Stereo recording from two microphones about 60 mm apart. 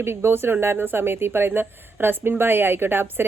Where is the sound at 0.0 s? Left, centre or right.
Right.